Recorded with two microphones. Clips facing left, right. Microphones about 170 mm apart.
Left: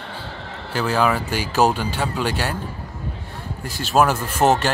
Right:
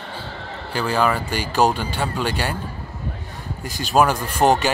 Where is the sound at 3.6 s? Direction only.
Centre (ahead or behind).